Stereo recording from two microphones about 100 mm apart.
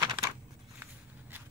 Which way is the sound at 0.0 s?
30° right (ahead or behind).